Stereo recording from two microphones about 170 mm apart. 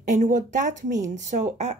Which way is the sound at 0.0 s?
45° right (ahead or behind).